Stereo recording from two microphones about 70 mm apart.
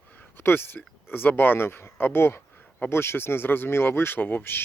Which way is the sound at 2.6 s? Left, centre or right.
Centre.